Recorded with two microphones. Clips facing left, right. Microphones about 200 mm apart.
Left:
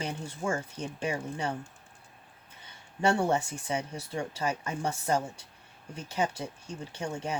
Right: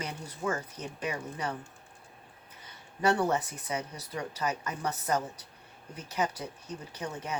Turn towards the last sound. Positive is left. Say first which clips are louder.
# left 2 dB
turn(degrees=30)  # may be behind; listen again after turning